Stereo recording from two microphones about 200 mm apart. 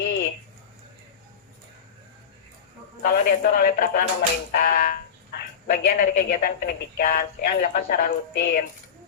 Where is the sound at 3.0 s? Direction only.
50° left (ahead or behind).